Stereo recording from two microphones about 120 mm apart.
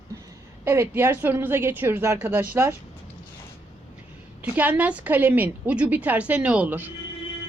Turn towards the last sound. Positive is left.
turn(degrees=-15)  # may be behind; listen again after turning